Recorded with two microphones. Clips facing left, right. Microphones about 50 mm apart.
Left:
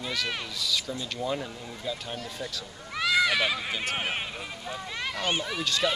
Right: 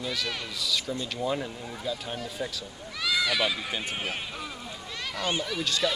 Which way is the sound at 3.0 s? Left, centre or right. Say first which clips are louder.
Left 3 dB; left.